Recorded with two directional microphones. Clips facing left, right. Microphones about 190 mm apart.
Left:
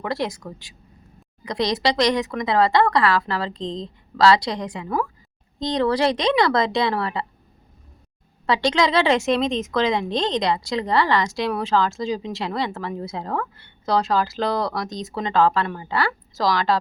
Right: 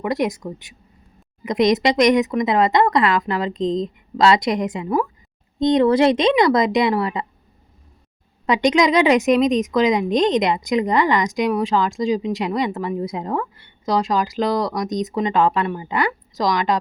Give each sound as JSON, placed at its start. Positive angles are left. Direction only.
{"t": 0.0, "sound": "a woman's voice", "side_deg": -15}
{"t": 8.4, "sound": "a woman's voice", "side_deg": -15}